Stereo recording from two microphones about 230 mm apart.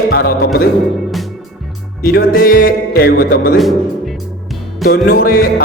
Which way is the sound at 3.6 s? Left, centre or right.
Centre.